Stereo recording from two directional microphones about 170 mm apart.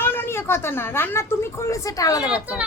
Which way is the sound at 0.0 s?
10° left (ahead or behind).